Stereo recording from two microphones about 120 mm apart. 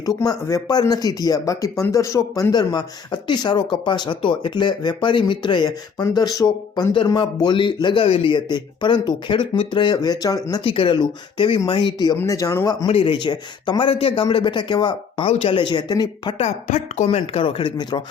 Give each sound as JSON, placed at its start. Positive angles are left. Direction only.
{"t": 0.0, "sound": "speech", "side_deg": 30}
{"t": 6.9, "sound": "speech", "side_deg": 40}
{"t": 8.0, "sound": "speech", "side_deg": 50}
{"t": 10.6, "sound": "speech", "side_deg": 45}
{"t": 12.1, "sound": "speech", "side_deg": 25}
{"t": 12.9, "sound": "speech", "side_deg": 50}
{"t": 16.4, "sound": "speech", "side_deg": 85}
{"t": 17.1, "sound": "speech", "side_deg": 50}